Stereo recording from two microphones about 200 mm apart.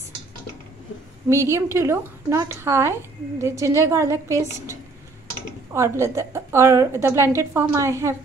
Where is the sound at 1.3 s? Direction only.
15° right (ahead or behind).